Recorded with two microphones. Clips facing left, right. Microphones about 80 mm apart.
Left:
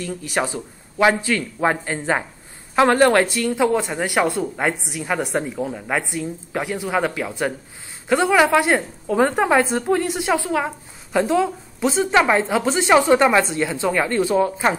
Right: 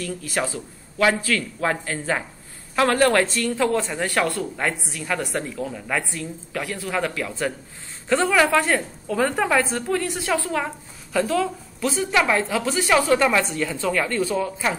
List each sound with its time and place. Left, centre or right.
0.0 s a woman's voice: centre